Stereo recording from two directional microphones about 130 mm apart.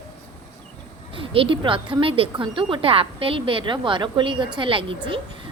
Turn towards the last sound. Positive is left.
turn(degrees=-40)  # may be behind; listen again after turning